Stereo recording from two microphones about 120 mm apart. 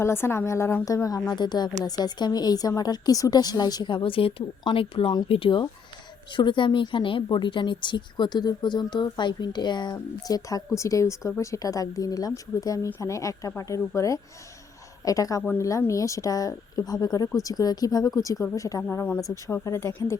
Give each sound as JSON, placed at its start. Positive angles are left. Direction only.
{"t": 0.0, "sound": "a woman's voice", "side_deg": 20}